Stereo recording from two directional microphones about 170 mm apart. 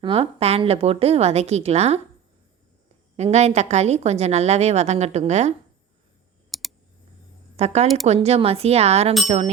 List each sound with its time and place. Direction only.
0.0 s a woman's voice: 35° right (ahead or behind)
3.2 s a woman's voice: 40° right (ahead or behind)
6.5 s clicking: centre (ahead or behind)
7.5 s a woman's voice: 40° right (ahead or behind)